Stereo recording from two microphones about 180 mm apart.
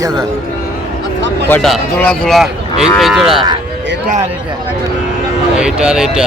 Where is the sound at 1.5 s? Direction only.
5° left (ahead or behind).